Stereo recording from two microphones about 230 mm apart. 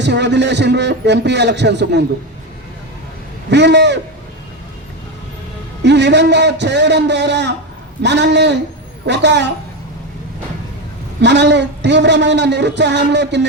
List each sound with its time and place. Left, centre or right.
0.0 s a man's voice: right
3.5 s a man's voice: right
5.8 s a man's voice: right
11.2 s a man's voice: right